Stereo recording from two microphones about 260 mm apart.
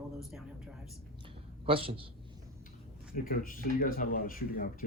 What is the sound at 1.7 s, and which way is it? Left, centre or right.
Speech, right.